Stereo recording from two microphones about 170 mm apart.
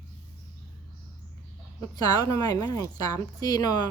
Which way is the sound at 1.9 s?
20° left (ahead or behind).